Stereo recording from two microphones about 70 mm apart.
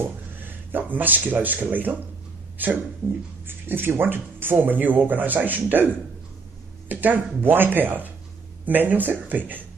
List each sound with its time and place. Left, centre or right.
0.4 s speech: right
6.9 s speech: right